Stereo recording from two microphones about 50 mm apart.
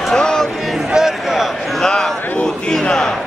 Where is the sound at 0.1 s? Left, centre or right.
Centre.